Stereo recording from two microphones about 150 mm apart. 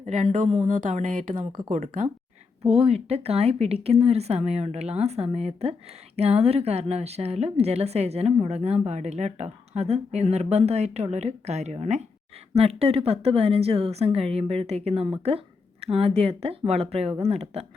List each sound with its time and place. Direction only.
0.0 s speech: 55° right (ahead or behind)
2.6 s a woman's voice: 40° right (ahead or behind)